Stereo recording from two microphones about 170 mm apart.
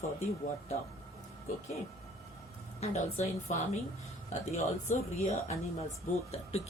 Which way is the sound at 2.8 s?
40° left (ahead or behind).